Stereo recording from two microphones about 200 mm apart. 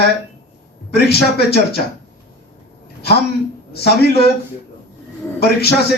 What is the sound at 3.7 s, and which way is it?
Speech, 55° left (ahead or behind).